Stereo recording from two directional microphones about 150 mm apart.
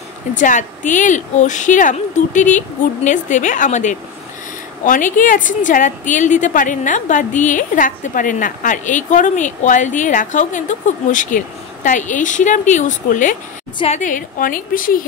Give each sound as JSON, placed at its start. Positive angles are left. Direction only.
{"t": 0.3, "sound": "a woman's voice", "side_deg": 60}